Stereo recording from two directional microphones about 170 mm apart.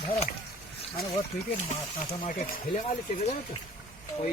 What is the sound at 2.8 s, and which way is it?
Speech, 40° left (ahead or behind).